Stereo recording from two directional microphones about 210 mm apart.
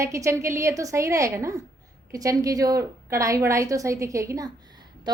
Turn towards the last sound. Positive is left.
turn(degrees=-20)  # may be behind; listen again after turning